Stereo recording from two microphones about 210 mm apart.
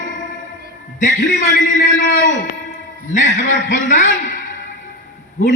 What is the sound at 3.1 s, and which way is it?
A man's voice, 35° left (ahead or behind).